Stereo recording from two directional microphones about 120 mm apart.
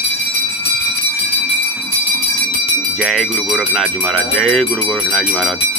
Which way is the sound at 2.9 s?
Centre (ahead or behind).